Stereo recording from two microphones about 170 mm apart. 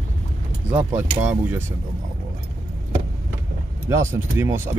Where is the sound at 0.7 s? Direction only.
15° right (ahead or behind).